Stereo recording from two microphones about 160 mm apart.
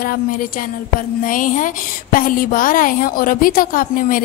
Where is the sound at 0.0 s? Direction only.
60° left (ahead or behind).